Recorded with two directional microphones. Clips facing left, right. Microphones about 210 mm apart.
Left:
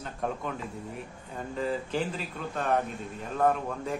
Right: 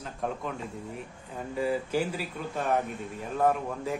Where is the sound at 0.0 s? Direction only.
Centre (ahead or behind).